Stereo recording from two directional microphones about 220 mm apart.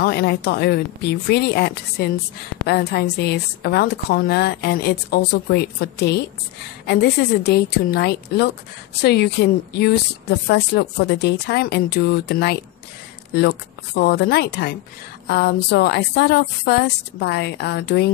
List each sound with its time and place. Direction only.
0.0 s a woman's voice: 45° left (ahead or behind)